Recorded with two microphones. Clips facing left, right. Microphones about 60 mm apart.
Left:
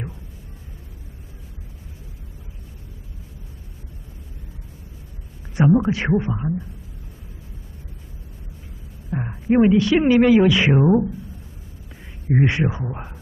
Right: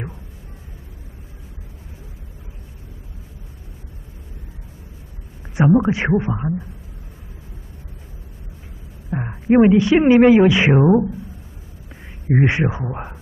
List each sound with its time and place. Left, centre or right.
5.6 s speech: centre
9.1 s speech: centre
12.3 s speech: right